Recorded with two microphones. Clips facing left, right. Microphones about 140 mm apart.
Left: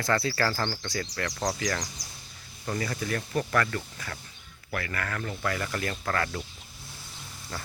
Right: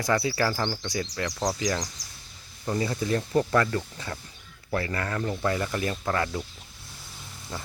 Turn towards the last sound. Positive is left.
turn(degrees=-15)  # may be behind; listen again after turning